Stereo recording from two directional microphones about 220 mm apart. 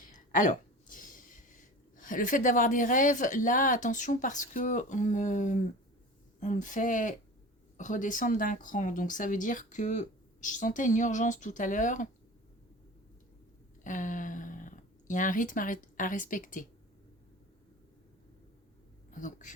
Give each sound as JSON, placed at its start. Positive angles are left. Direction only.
{"t": 0.1, "sound": "speech", "side_deg": 35}
{"t": 13.8, "sound": "speech", "side_deg": 35}
{"t": 19.1, "sound": "speech", "side_deg": 35}